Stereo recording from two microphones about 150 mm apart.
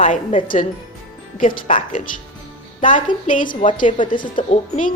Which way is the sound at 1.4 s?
65° left (ahead or behind).